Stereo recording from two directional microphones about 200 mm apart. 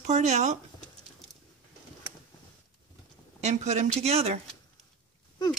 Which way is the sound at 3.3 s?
35° right (ahead or behind).